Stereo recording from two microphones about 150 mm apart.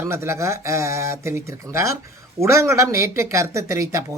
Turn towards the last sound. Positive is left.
turn(degrees=-20)  # may be behind; listen again after turning